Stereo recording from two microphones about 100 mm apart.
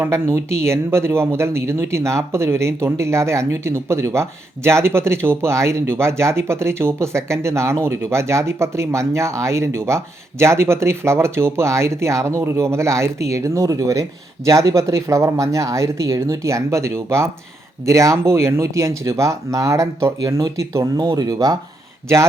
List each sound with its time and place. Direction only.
0.0 s speech: 25° right (ahead or behind)